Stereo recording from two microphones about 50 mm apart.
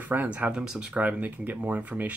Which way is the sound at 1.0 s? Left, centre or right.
Right.